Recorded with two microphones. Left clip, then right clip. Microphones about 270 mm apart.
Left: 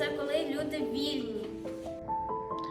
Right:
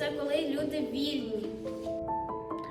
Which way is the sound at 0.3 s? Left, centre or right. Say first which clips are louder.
Right 1 dB; centre.